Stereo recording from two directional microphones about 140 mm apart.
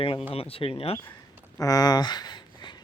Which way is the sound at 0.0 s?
40° left (ahead or behind).